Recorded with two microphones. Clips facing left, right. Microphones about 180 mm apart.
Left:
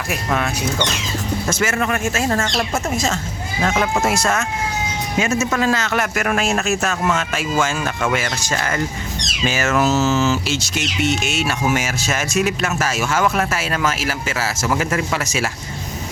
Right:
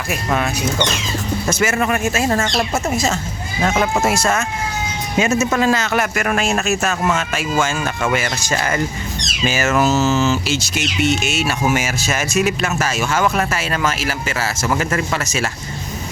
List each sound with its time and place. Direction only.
0.1 s speech: 5° right (ahead or behind)
5.2 s speech: 20° right (ahead or behind)
6.1 s speech: centre (ahead or behind)